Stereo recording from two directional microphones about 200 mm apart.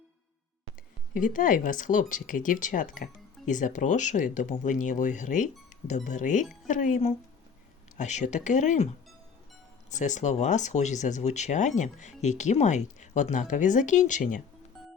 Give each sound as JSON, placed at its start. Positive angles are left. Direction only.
{"t": 1.1, "sound": "speech", "side_deg": 40}
{"t": 9.9, "sound": "speech", "side_deg": 40}